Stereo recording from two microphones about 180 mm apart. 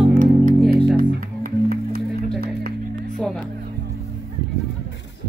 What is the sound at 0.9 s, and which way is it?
Music, 50° right (ahead or behind).